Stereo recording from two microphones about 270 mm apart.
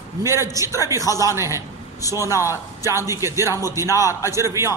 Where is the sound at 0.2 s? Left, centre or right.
Centre.